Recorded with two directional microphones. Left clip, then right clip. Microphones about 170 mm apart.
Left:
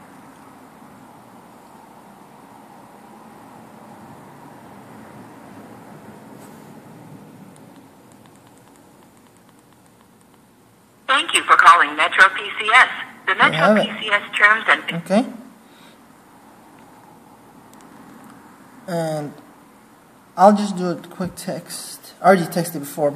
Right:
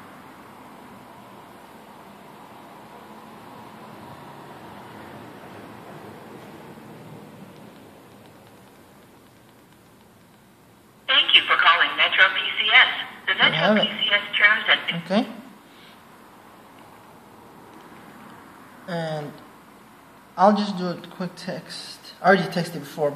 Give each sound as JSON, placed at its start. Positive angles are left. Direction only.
{"t": 11.1, "sound": "a woman's voice", "side_deg": 10}
{"t": 18.9, "sound": "speech", "side_deg": 45}
{"t": 20.3, "sound": "speech", "side_deg": 45}